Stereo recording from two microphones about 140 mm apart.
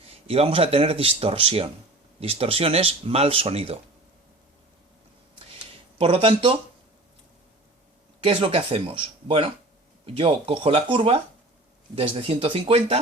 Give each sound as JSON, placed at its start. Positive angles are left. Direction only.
{"t": 0.3, "sound": "speech", "side_deg": -45}
{"t": 6.0, "sound": "speech", "side_deg": -40}
{"t": 8.2, "sound": "speech", "side_deg": -40}